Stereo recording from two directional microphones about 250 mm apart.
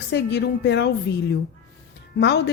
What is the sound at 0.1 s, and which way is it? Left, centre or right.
Speech, left.